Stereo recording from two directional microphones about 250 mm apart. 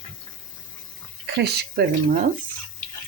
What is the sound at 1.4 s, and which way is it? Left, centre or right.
Speech, right.